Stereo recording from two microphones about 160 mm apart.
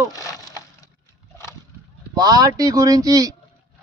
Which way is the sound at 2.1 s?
20° right (ahead or behind).